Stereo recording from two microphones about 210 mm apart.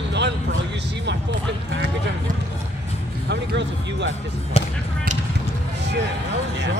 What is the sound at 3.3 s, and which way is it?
Speech, 55° right (ahead or behind).